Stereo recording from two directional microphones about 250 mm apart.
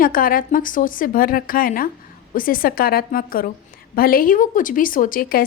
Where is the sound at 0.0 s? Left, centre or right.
Left.